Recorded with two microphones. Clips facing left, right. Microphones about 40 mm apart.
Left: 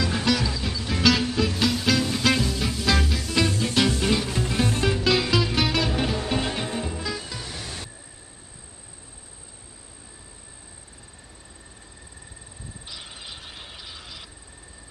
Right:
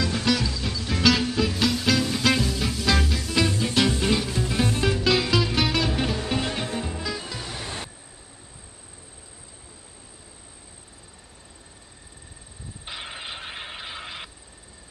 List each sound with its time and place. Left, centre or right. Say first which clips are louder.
0.0 s music: even; centre
7.6 s music: right 3 dB; right
12.8 s vehicle: right 6 dB; right